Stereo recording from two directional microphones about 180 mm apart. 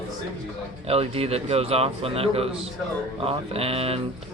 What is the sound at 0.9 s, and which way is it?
Speech, 35° right (ahead or behind).